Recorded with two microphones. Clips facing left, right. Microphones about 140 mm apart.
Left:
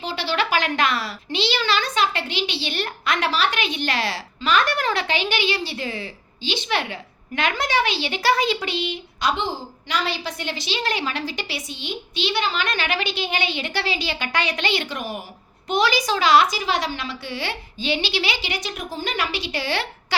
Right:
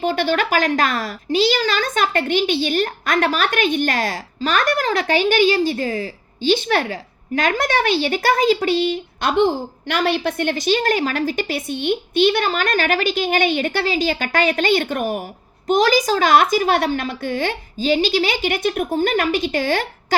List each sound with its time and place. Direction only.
0.0 s a woman's voice: 50° right (ahead or behind)